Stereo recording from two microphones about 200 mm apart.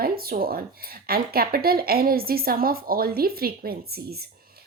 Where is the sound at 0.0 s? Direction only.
50° right (ahead or behind).